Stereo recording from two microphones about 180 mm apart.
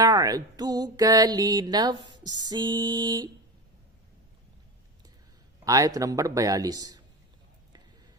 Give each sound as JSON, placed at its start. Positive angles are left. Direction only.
{"t": 0.0, "sound": "music", "side_deg": -20}
{"t": 5.6, "sound": "music", "side_deg": -20}